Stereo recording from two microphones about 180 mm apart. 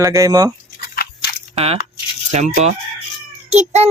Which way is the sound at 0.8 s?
60° left (ahead or behind).